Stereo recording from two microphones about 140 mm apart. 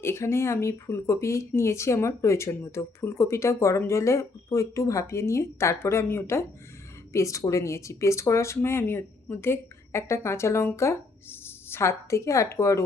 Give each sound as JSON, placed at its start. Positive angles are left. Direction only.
{"t": 0.0, "sound": "speech", "side_deg": 20}